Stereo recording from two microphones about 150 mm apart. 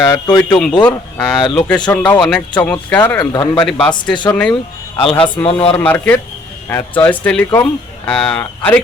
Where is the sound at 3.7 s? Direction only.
5° left (ahead or behind).